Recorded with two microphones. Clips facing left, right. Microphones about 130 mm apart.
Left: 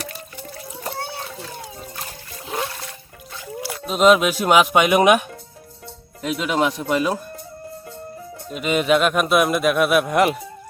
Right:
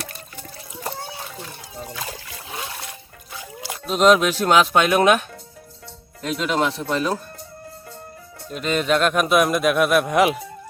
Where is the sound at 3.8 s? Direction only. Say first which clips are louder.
Left 1 dB; 5° left (ahead or behind).